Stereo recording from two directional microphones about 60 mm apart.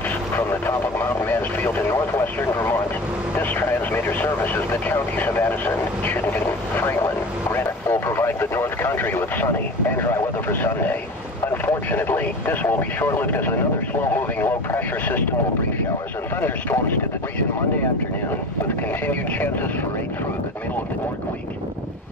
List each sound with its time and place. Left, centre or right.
0.4 s speech: left
7.5 s vehicle: left
11.4 s speech: left
16.3 s speech: left
18.9 s speech: left